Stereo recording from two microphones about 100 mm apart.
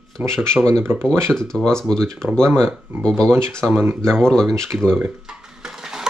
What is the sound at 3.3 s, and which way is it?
Speech, 25° right (ahead or behind).